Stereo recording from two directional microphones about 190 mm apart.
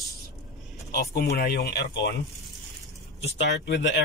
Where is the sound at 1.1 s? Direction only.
60° left (ahead or behind).